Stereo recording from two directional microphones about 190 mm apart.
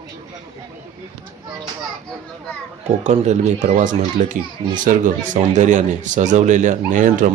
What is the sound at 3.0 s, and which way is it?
A man's voice, 35° right (ahead or behind).